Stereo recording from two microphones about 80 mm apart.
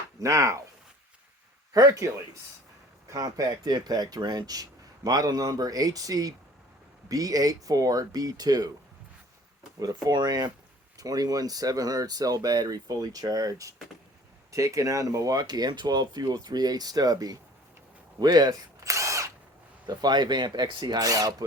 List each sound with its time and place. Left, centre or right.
0.2 s speech: right
1.7 s speech: right
3.1 s speech: right
9.8 s speech: right
18.8 s drill: right
19.8 s speech: right